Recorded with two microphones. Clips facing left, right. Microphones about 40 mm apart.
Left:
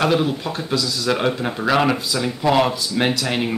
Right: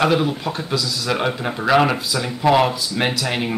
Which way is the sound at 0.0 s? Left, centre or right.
Centre.